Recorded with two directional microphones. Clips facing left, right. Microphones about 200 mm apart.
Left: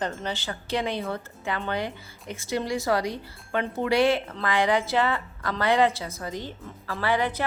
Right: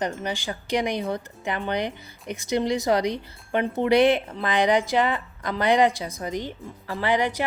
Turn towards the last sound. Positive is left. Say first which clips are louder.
# right 2 dB
turn(degrees=-15)  # may be behind; listen again after turning